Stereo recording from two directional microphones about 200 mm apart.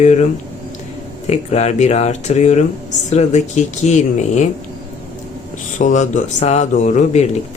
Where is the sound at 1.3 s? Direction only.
35° left (ahead or behind).